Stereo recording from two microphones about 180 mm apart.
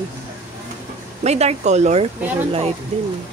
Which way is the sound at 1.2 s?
35° right (ahead or behind).